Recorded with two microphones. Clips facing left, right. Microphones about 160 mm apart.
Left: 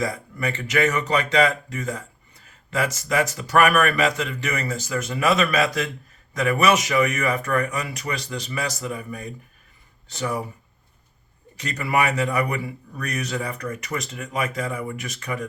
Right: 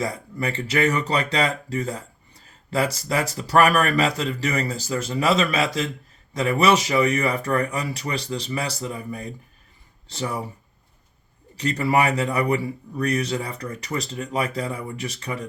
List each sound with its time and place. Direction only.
0.0 s speech: 30° right (ahead or behind)
11.5 s speech: 35° right (ahead or behind)